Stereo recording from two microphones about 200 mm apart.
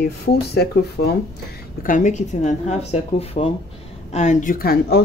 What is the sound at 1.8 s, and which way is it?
Speech, 40° left (ahead or behind).